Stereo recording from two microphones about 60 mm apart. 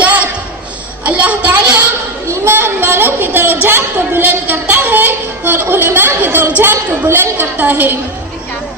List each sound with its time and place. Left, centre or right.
0.0 s a sound: right
1.0 s a child's voice: right
2.4 s a woman's voice: right